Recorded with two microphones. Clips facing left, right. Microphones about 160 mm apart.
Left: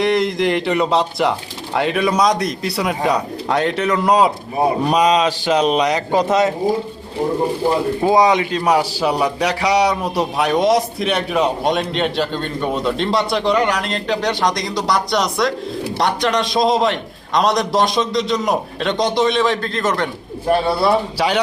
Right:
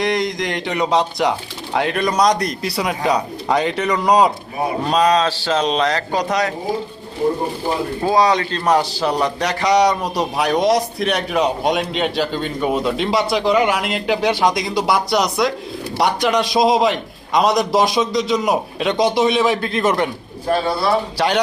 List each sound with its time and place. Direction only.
0.0 s speech: centre (ahead or behind)
4.9 s speech: 15° left (ahead or behind)
8.0 s speech: 20° left (ahead or behind); by 20.1 s 10° right (ahead or behind)
21.2 s speech: 5° left (ahead or behind)